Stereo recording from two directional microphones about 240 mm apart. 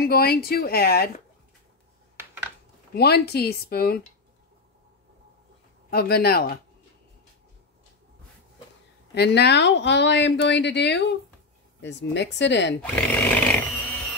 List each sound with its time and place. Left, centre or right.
0.0 s speech: left
2.9 s speech: left
5.9 s speech: left
9.1 s speech: left
12.9 s a sound: centre